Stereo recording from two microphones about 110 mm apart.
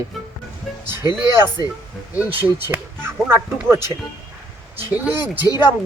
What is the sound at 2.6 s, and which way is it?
Speech, 20° right (ahead or behind).